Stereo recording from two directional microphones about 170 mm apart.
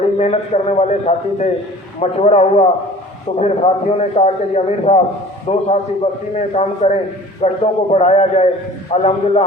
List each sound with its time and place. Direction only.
0.0 s a man's voice: 40° left (ahead or behind)